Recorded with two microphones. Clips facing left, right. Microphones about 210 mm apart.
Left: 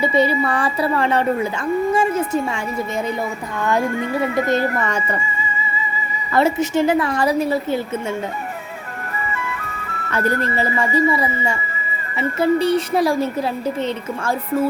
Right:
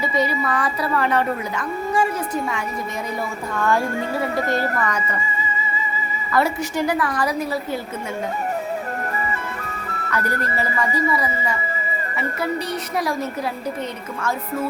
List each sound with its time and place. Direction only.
0.0 s a woman's voice: 30° left (ahead or behind)
6.3 s a woman's voice: 25° left (ahead or behind)
10.1 s a woman's voice: 25° left (ahead or behind)